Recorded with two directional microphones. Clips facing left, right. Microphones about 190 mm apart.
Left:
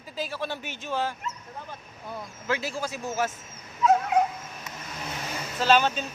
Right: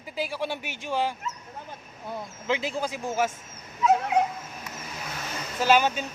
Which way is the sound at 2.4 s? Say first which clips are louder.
Right 2 dB; 20° right (ahead or behind).